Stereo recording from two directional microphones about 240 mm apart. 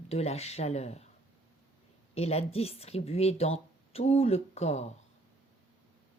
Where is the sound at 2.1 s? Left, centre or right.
Left.